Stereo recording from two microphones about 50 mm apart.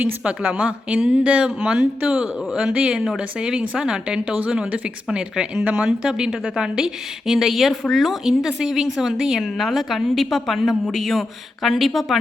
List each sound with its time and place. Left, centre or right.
0.3 s a woman's voice: right
2.0 s speech: right
5.8 s a woman's voice: centre
7.3 s speech: centre